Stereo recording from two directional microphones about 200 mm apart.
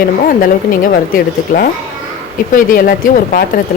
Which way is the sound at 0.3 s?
45° left (ahead or behind).